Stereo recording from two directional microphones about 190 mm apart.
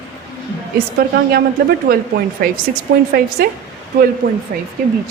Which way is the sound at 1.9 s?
55° right (ahead or behind).